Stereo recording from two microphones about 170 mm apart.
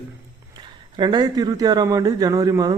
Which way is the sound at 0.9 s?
25° right (ahead or behind).